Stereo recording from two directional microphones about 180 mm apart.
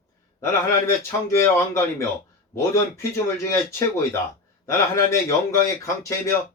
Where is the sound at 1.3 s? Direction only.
15° left (ahead or behind).